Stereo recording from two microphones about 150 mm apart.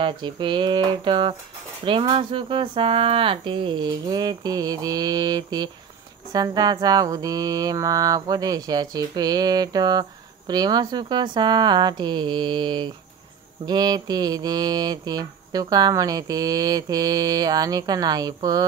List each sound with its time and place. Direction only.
0.0 s speech: 30° right (ahead or behind)
6.3 s mantra: 25° right (ahead or behind)